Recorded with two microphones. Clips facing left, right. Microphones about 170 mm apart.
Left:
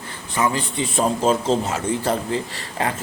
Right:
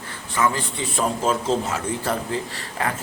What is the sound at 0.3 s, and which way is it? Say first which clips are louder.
A man's voice: left 1 dB; 20° left (ahead or behind).